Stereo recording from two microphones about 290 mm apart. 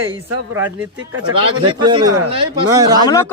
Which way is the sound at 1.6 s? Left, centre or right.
Centre.